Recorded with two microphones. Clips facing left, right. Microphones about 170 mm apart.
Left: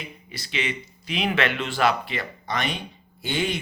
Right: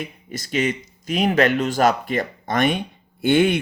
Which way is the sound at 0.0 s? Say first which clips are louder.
Right 8 dB; 45° right (ahead or behind).